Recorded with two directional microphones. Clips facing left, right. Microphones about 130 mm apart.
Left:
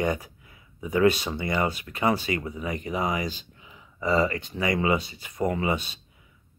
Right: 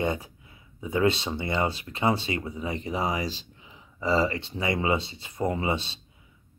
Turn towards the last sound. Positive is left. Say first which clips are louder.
# left 1 dB
turn(degrees=-25)  # may be behind; listen again after turning